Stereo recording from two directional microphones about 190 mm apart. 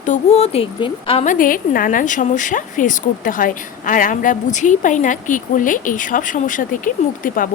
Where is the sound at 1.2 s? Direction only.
45° left (ahead or behind).